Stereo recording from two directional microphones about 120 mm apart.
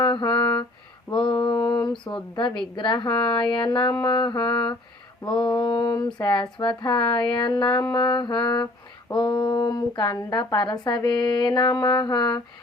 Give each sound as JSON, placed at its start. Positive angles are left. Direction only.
{"t": 0.0, "sound": "humming", "side_deg": 45}
{"t": 1.1, "sound": "mantra", "side_deg": 45}
{"t": 1.7, "sound": "speech", "side_deg": 40}